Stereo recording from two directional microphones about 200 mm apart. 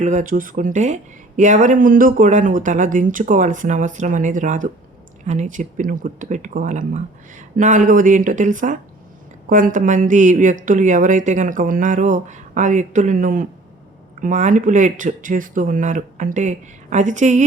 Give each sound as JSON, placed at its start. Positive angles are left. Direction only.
{"t": 0.0, "sound": "speech", "side_deg": -40}